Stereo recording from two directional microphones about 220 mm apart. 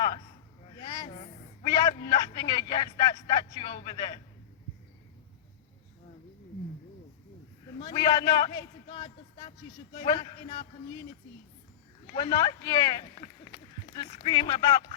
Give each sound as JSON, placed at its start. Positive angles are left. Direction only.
{"t": 0.8, "sound": "a sound", "side_deg": 20}
{"t": 2.0, "sound": "a man's voice", "side_deg": 20}
{"t": 7.8, "sound": "a man's voice", "side_deg": 20}
{"t": 12.1, "sound": "a man's voice", "side_deg": 20}